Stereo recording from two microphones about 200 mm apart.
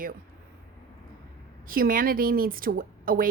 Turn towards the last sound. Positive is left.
turn(degrees=-45)  # may be behind; listen again after turning